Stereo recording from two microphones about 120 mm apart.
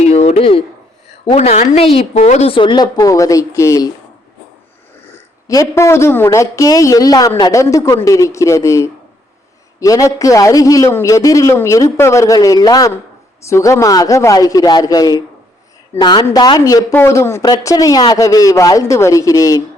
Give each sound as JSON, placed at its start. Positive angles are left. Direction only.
{"t": 0.0, "sound": "a sound", "side_deg": 65}
{"t": 1.4, "sound": "a woman's voice", "side_deg": 70}
{"t": 5.1, "sound": "a man's voice", "side_deg": 25}